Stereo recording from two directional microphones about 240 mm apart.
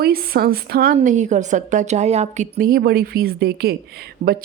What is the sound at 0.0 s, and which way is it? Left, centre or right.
A woman's voice, right.